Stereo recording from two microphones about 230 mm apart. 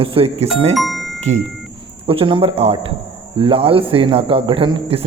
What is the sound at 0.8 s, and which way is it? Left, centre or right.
Music, centre.